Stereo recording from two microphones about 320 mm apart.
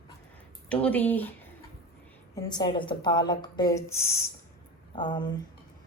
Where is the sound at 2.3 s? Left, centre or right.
Centre.